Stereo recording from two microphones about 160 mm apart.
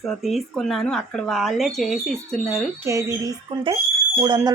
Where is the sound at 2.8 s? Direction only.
20° right (ahead or behind).